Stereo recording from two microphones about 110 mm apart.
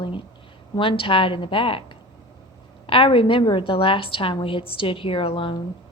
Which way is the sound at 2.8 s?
55° left (ahead or behind).